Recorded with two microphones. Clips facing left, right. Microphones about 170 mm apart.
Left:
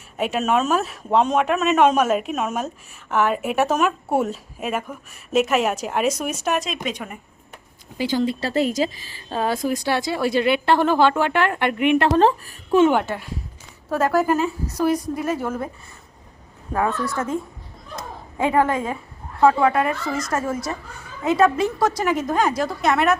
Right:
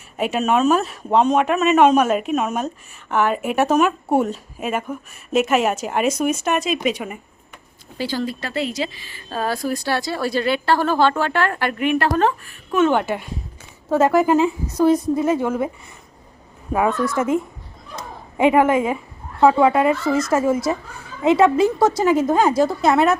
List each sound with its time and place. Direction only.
0.2 s speech: centre (ahead or behind)
7.9 s a woman's voice: 20° left (ahead or behind)
8.4 s a woman's voice: 40° left (ahead or behind)
9.3 s a woman's voice: 20° left (ahead or behind)
13.1 s a woman's voice: 20° right (ahead or behind)
16.7 s a woman's voice: 15° right (ahead or behind)